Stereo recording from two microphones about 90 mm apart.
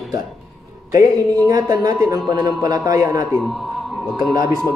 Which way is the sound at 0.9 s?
45° right (ahead or behind).